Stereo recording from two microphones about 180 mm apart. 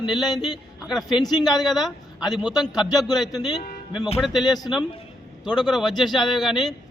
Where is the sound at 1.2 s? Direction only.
20° left (ahead or behind).